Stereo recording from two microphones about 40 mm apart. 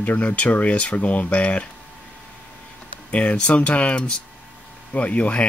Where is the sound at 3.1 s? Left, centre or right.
Left.